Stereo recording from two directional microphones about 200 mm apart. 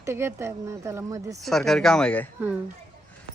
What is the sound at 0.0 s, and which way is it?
Speech, 10° right (ahead or behind).